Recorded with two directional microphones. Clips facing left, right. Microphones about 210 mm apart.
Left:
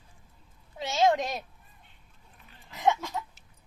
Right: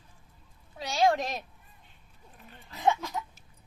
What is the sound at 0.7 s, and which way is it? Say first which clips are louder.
Speech: left 1 dB; 25° left (ahead or behind).